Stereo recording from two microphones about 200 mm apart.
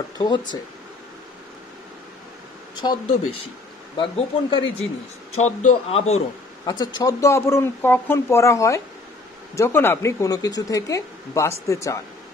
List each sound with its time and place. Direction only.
0.2 s speech: 25° left (ahead or behind)
2.7 s speech: 20° left (ahead or behind)
5.3 s speech: 35° left (ahead or behind)
6.6 s speech: 20° left (ahead or behind)